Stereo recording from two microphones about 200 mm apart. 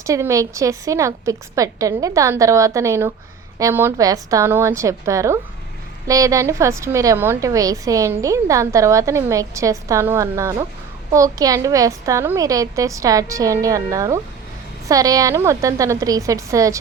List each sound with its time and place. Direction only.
0.0 s a woman's voice: 15° right (ahead or behind)